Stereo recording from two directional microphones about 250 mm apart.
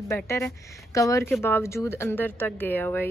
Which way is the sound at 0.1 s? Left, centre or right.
Centre.